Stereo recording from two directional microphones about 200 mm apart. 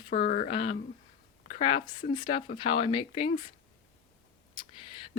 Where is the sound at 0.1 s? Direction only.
40° left (ahead or behind).